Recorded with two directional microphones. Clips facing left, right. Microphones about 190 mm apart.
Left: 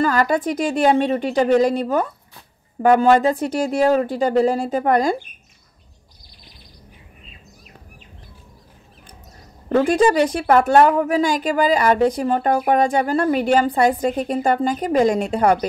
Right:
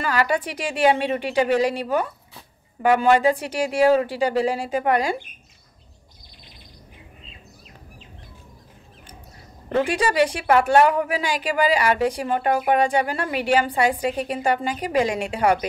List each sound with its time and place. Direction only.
0.1 s a woman's voice: 45° left (ahead or behind)
2.8 s a woman's voice: 40° left (ahead or behind)
9.7 s a woman's voice: 40° left (ahead or behind)